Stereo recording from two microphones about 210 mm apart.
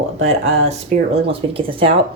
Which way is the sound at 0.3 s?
30° right (ahead or behind).